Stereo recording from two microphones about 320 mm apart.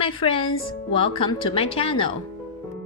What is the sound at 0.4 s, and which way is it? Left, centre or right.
Speech, left.